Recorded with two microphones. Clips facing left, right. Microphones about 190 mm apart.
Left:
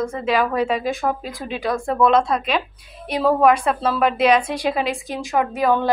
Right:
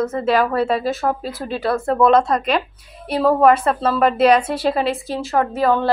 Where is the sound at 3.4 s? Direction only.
10° left (ahead or behind).